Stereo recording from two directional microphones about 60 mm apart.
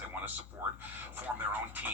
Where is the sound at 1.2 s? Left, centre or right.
Right.